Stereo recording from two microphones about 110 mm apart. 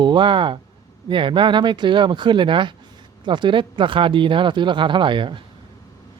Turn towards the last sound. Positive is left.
turn(degrees=-45)  # may be behind; listen again after turning